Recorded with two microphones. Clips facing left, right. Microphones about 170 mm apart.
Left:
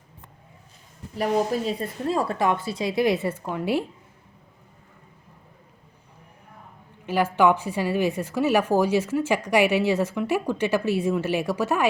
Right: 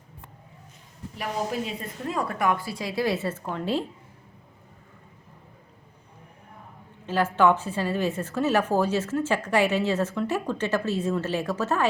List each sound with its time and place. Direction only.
1.6 s a woman's voice: 35° left (ahead or behind); by 3.8 s 10° left (ahead or behind)
7.0 s a woman's voice: 10° left (ahead or behind)